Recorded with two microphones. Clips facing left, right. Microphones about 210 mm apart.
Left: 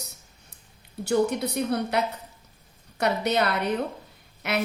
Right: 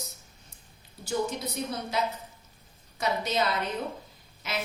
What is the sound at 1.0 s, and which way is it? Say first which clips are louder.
A woman's voice: left 7 dB; 65° left (ahead or behind).